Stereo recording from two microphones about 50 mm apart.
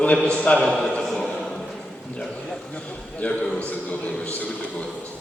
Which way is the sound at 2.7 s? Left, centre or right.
Left.